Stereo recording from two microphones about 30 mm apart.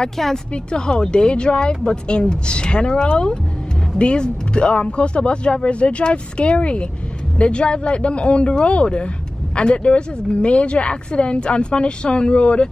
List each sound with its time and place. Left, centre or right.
0.2 s a woman's voice: centre
0.7 s a woman's voice: left